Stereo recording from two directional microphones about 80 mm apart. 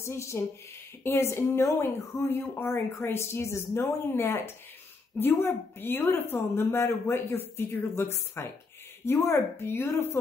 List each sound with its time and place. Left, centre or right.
0.0 s a woman's voice: left